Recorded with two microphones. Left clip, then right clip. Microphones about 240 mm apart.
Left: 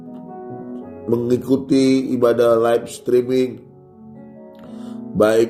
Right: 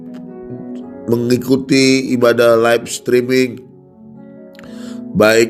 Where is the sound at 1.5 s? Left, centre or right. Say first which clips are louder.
Right 5 dB; right.